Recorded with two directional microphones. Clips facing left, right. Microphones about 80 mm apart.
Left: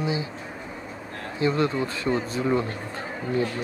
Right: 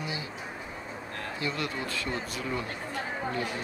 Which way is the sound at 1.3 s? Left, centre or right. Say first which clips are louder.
Left 11 dB; left.